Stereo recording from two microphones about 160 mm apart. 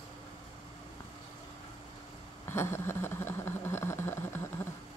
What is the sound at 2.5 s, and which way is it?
Vehicle, 15° left (ahead or behind).